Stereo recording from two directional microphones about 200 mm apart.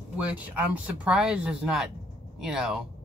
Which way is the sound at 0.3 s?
5° right (ahead or behind).